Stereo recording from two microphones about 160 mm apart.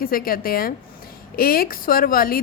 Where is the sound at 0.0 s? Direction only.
65° left (ahead or behind).